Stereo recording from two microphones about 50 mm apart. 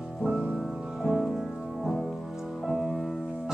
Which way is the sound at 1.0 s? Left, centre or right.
Centre.